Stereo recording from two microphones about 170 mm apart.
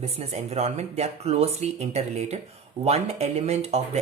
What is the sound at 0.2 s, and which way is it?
Speech, 40° right (ahead or behind).